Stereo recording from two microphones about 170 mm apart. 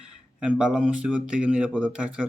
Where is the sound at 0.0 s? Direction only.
5° right (ahead or behind).